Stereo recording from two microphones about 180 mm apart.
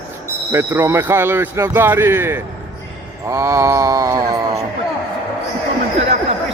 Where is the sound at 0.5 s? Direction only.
15° right (ahead or behind).